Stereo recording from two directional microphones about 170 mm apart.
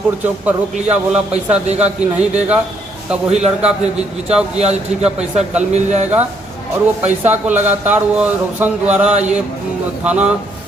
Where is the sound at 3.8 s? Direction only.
40° right (ahead or behind).